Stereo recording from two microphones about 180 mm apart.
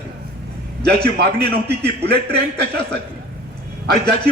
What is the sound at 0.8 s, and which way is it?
A man's voice, 65° right (ahead or behind).